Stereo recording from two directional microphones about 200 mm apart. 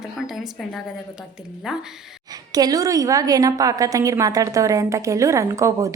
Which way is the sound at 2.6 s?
20° right (ahead or behind).